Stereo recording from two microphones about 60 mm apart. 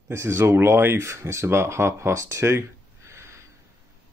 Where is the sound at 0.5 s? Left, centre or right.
Right.